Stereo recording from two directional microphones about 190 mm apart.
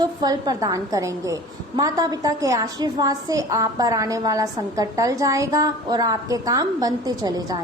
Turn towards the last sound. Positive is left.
turn(degrees=-20)  # may be behind; listen again after turning